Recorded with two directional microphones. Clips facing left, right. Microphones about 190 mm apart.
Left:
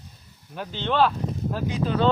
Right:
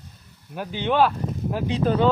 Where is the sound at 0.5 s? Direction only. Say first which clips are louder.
Right 2 dB; 10° right (ahead or behind).